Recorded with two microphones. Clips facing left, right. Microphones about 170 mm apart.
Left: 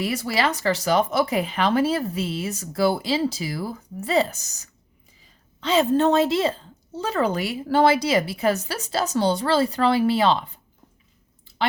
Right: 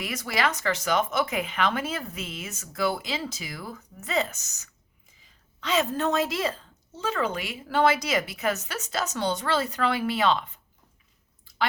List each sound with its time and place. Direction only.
0.0 s speech: 30° left (ahead or behind)
11.5 s chewing: 25° left (ahead or behind)